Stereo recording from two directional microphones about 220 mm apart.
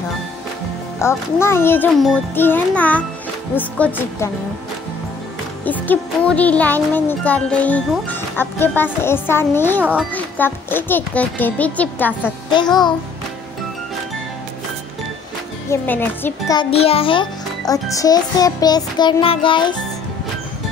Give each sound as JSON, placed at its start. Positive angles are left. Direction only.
{"t": 1.0, "sound": "music", "side_deg": 10}
{"t": 5.7, "sound": "music", "side_deg": 5}
{"t": 15.7, "sound": "music", "side_deg": 10}
{"t": 16.7, "sound": "a child's voice", "side_deg": 25}
{"t": 17.9, "sound": "music", "side_deg": 15}